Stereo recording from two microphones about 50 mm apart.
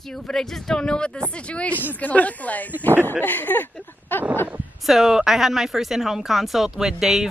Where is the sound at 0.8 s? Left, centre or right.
Centre; by 4.2 s left.